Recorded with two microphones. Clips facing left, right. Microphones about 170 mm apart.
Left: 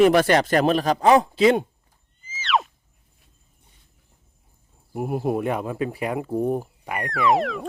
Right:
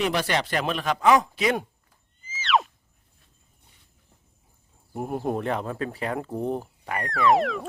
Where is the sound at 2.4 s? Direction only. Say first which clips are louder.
Even; centre (ahead or behind).